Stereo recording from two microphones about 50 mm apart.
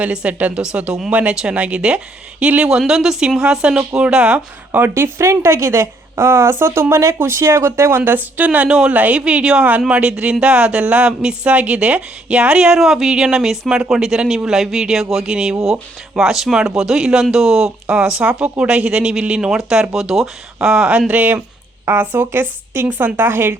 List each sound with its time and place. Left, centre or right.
0.0 s speech: right
2.6 s speech: centre
4.9 s a woman's voice: right
6.9 s a woman's voice: right
8.0 s speech: right
9.2 s speech: centre
12.7 s speech: centre
20.6 s speech: centre
21.1 s speech: right
21.8 s a woman's voice: right
22.9 s a woman's voice: right